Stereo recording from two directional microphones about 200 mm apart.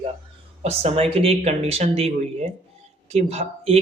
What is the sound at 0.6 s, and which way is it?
Speech, 30° right (ahead or behind).